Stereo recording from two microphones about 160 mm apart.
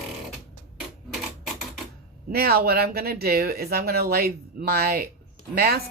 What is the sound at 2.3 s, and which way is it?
Speech, 75° right (ahead or behind).